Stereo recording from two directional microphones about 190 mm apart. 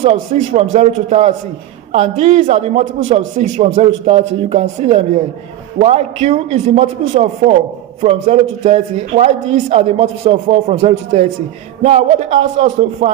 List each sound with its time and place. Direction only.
0.0 s a man's voice: 35° right (ahead or behind)
8.0 s a man's voice: 35° right (ahead or behind)